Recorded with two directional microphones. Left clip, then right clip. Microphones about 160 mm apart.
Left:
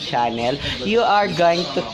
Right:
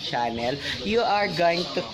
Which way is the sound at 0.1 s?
Centre (ahead or behind).